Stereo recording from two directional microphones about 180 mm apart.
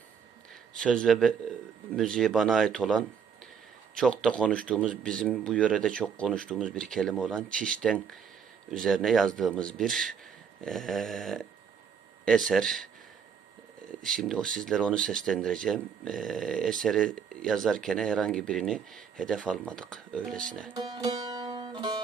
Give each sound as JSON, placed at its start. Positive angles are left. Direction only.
{"t": 0.8, "sound": "speech", "side_deg": 5}
{"t": 14.0, "sound": "speech", "side_deg": 0}
{"t": 20.7, "sound": "music", "side_deg": -25}